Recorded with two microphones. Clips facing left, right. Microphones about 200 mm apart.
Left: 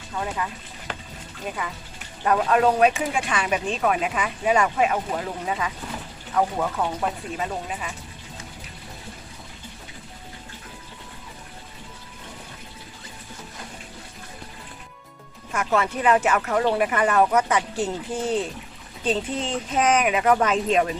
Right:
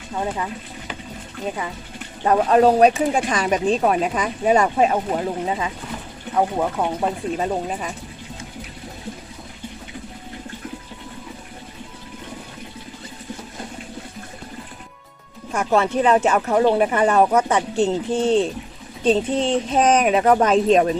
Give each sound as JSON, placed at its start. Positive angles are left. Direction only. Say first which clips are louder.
{"t": 1.5, "sound": "speech", "louder": "right 3 dB", "side_deg": -25}
{"t": 15.5, "sound": "speech", "louder": "right 5 dB", "side_deg": -30}